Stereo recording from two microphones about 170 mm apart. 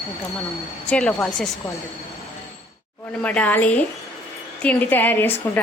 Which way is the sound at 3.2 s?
10° left (ahead or behind).